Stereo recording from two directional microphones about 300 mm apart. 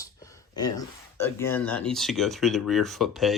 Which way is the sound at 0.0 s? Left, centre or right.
Centre.